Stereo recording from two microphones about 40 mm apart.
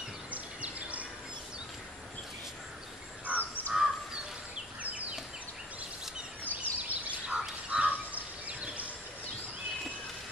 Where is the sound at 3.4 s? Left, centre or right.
Left.